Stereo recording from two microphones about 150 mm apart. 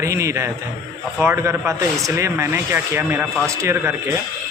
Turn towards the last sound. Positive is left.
turn(degrees=-20)  # may be behind; listen again after turning